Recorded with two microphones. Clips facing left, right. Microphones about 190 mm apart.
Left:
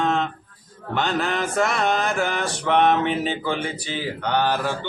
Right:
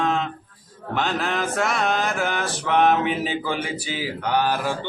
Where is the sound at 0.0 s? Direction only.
Centre (ahead or behind).